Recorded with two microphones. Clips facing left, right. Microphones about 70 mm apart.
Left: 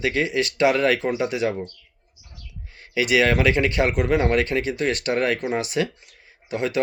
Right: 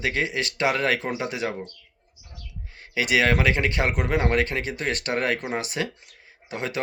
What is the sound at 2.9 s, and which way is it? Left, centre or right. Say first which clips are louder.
Speech: left 2 dB; right.